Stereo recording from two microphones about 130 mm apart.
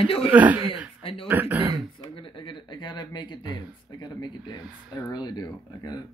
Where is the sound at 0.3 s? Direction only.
10° right (ahead or behind).